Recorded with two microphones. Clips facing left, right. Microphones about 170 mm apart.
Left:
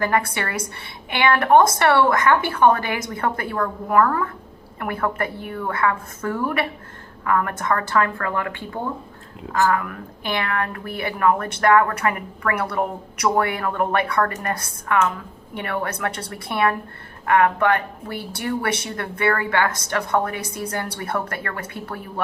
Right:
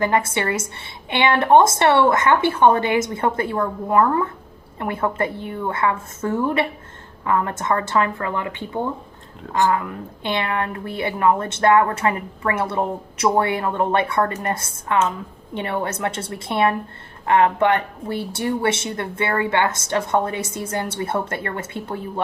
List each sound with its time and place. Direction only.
0.0 s a woman's voice: 20° right (ahead or behind)